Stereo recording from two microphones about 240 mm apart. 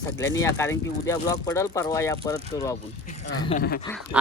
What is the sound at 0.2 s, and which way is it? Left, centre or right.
Speech, centre.